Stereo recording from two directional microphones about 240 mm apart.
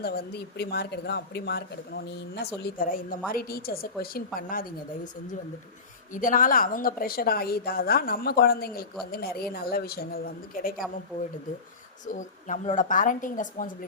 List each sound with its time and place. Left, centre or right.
0.0 s a woman's voice: left
6.1 s a woman's voice: left
12.0 s a woman's voice: left